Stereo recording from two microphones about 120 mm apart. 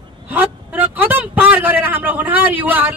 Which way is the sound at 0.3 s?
15° right (ahead or behind).